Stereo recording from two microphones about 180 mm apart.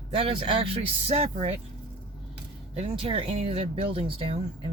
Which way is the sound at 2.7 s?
30° right (ahead or behind).